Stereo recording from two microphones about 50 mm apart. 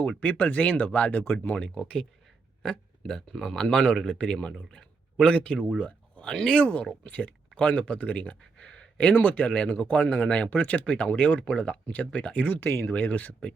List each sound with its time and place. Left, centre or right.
0.2 s speech: left
1.5 s speech: centre
5.5 s speech: centre
6.2 s speech: centre
6.6 s speech: left
9.1 s speech: left
10.6 s speech: left
10.8 s speech: centre
12.5 s speech: left
12.9 s speech: left